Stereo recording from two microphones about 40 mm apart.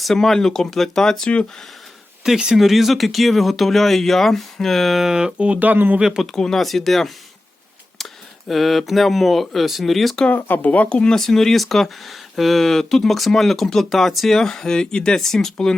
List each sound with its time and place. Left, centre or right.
0.0 s speech: centre
2.2 s speech: centre
5.0 s speech: centre
5.5 s speech: right
6.0 s speech: centre
6.2 s speech: centre
8.4 s speech: centre
10.2 s speech: left
11.1 s speech: centre
14.3 s speech: centre